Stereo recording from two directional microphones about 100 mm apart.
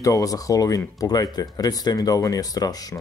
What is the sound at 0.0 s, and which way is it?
Speech, 35° left (ahead or behind).